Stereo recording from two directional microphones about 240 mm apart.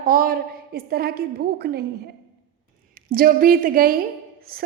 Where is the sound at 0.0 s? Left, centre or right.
Right.